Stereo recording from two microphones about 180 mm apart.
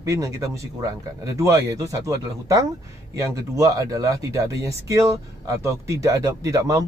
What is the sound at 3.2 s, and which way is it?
Speech, 15° right (ahead or behind).